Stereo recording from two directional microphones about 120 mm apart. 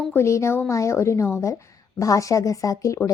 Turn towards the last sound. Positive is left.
turn(degrees=25)  # may be behind; listen again after turning